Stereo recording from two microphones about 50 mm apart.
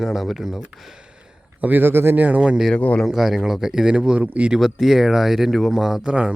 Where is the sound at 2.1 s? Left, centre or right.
Right.